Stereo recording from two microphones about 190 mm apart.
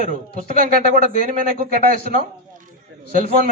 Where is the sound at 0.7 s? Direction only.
50° right (ahead or behind).